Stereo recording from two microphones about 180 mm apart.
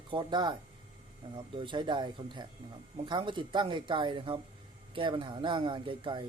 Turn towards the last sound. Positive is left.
turn(degrees=-30)  # may be behind; listen again after turning